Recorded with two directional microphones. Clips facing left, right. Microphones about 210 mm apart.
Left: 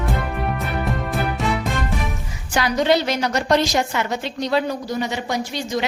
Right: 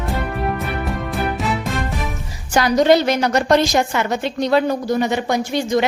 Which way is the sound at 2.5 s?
40° right (ahead or behind).